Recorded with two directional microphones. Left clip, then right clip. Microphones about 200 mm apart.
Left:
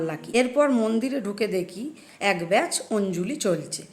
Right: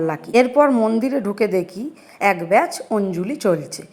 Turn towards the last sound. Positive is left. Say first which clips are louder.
# right 5 dB
turn(degrees=-10)  # may be behind; listen again after turning